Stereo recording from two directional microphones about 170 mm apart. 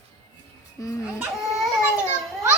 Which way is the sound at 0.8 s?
20° left (ahead or behind).